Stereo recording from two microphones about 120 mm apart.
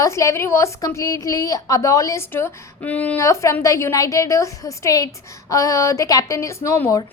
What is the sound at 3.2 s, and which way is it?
A woman's voice, 25° left (ahead or behind).